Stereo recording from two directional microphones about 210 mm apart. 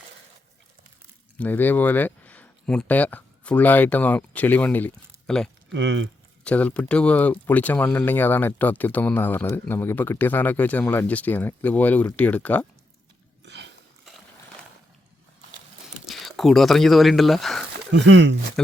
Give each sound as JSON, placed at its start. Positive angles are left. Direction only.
{"t": 1.4, "sound": "speech", "side_deg": 10}
{"t": 5.7, "sound": "speech", "side_deg": -60}
{"t": 6.4, "sound": "speech", "side_deg": 5}
{"t": 13.4, "sound": "a sound", "side_deg": -55}
{"t": 14.0, "sound": "a sound", "side_deg": 0}
{"t": 16.0, "sound": "speech", "side_deg": 0}
{"t": 17.9, "sound": "speech", "side_deg": -60}